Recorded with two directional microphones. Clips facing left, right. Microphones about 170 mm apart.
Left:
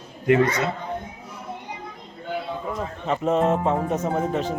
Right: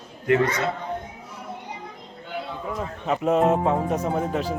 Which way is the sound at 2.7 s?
Centre (ahead or behind).